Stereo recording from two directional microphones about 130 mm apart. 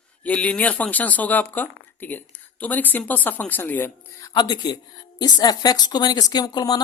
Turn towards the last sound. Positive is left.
turn(degrees=30)  # may be behind; listen again after turning